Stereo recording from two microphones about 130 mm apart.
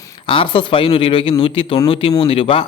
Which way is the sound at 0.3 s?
40° left (ahead or behind).